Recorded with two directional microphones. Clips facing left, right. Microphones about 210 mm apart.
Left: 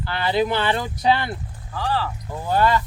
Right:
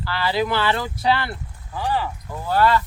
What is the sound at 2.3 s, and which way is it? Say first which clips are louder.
Speech: right 1 dB; 20° left (ahead or behind).